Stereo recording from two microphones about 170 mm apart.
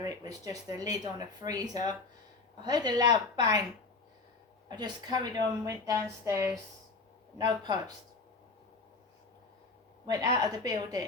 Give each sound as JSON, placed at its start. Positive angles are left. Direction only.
{"t": 0.0, "sound": "speech", "side_deg": -20}
{"t": 4.8, "sound": "speech", "side_deg": -25}
{"t": 10.1, "sound": "speech", "side_deg": -20}